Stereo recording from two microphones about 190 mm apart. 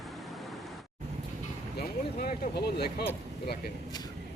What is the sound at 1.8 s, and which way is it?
Vehicle, 50° left (ahead or behind).